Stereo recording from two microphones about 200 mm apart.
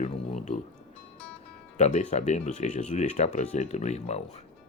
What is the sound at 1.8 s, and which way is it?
Speech, 35° left (ahead or behind).